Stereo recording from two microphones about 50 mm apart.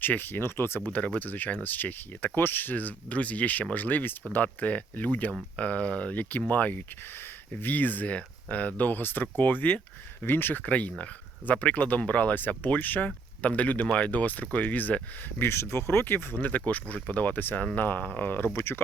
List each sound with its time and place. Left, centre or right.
0.0 s speech: left
0.9 s speech: left
4.4 s speech: left
10.6 s speech: left
15.4 s speech: left
18.5 s speech: left